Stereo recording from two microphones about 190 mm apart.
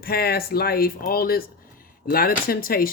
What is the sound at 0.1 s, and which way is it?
Speech, 55° left (ahead or behind).